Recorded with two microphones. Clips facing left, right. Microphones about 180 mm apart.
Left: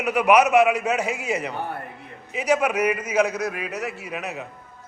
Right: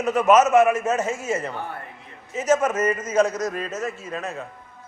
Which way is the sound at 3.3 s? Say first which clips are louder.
Right 1 dB; 65° left (ahead or behind).